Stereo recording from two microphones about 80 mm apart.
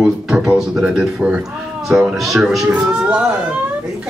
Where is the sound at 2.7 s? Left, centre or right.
Centre.